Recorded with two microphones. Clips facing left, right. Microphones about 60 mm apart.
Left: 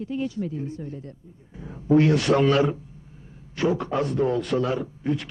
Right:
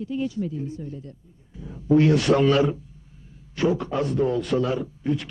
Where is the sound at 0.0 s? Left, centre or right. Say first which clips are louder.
Right 1 dB; left.